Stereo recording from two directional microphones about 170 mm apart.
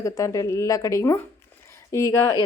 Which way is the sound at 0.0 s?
20° left (ahead or behind).